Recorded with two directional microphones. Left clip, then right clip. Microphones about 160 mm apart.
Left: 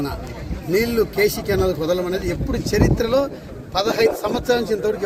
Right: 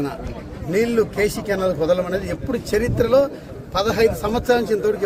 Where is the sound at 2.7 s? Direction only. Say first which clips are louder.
Right 2 dB; 5° right (ahead or behind).